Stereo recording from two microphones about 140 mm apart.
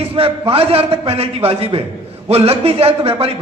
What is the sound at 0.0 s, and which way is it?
A man's voice, 45° right (ahead or behind).